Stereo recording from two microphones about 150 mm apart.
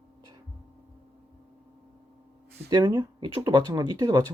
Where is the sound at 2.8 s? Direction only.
30° right (ahead or behind).